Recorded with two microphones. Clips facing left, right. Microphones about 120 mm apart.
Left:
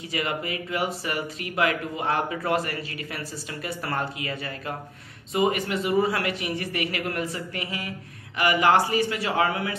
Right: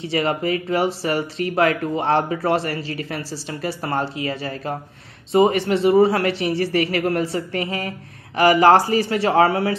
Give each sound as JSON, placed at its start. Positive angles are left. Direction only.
{"t": 0.0, "sound": "speech", "side_deg": -35}